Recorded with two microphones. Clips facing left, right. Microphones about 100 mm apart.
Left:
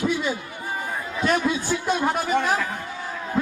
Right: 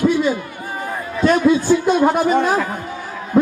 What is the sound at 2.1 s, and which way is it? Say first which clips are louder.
Speech: right 6 dB; 25° right (ahead or behind).